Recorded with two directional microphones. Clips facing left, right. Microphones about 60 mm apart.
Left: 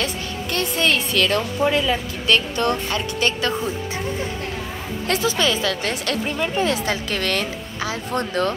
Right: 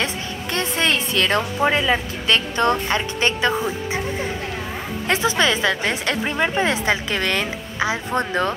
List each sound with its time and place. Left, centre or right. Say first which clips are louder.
0.0 s a woman's voice: even; right
5.1 s a woman's voice: right 2 dB; right